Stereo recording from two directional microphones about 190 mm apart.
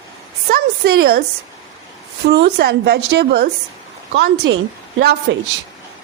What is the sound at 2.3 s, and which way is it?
A woman's voice, 60° right (ahead or behind).